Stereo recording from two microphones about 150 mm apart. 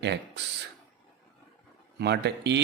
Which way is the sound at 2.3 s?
90° right.